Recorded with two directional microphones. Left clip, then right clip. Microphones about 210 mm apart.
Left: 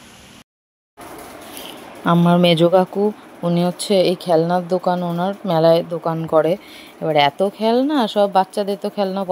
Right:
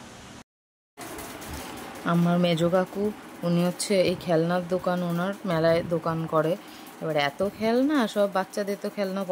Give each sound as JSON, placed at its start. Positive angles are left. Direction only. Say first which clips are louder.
{"t": 2.0, "sound": "speech", "louder": "left 10 dB", "side_deg": 20}